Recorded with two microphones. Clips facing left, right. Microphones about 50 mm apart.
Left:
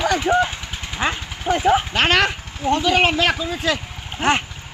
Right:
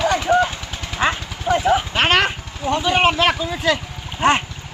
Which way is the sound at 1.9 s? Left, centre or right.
Right.